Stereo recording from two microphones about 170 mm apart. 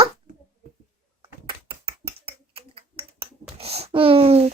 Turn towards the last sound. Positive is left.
turn(degrees=-35)  # may be behind; listen again after turning